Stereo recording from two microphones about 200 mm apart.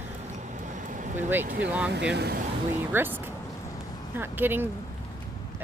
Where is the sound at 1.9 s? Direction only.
60° right (ahead or behind).